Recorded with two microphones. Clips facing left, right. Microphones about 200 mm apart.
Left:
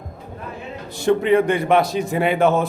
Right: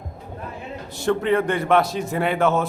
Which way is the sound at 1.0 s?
15° left (ahead or behind).